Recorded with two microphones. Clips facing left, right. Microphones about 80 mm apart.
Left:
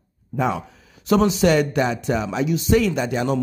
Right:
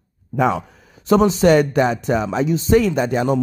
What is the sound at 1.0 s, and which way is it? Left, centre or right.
Speech, right.